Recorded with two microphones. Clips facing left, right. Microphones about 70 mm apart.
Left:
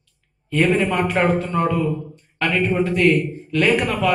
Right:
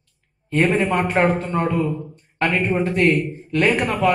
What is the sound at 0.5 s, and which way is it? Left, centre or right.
A man's voice, right.